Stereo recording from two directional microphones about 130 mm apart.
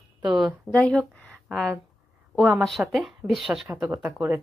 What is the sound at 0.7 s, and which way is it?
Speech, 5° left (ahead or behind).